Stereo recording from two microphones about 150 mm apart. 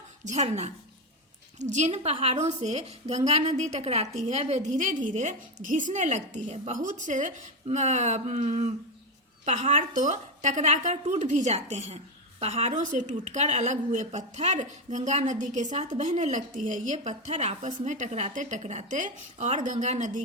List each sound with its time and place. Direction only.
0.3 s a woman's voice: 50° right (ahead or behind)